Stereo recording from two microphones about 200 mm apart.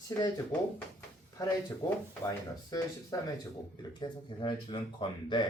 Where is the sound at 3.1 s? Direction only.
20° left (ahead or behind).